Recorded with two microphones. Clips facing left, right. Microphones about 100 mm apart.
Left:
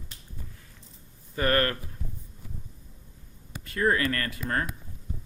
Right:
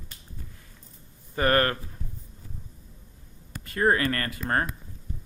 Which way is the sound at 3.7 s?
45° right (ahead or behind).